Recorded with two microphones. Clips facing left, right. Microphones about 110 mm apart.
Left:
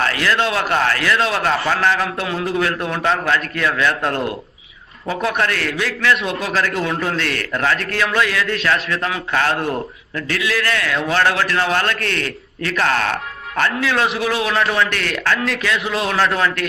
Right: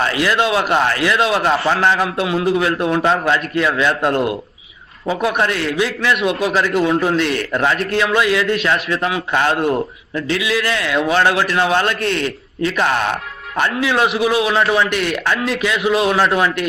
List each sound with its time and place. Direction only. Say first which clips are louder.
0.0 s a man's voice: right 2 dB; 15° right (ahead or behind)
2.1 s a man's voice: right 4 dB; 10° right (ahead or behind)
8.7 s a man's voice: right 2 dB; 30° right (ahead or behind)
9.0 s a man's voice: right 2 dB; 15° right (ahead or behind)